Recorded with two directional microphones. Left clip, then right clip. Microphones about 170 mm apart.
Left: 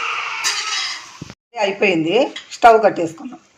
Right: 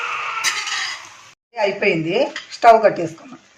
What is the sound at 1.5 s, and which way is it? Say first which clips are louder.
Speech: left 1 dB; 30° left (ahead or behind).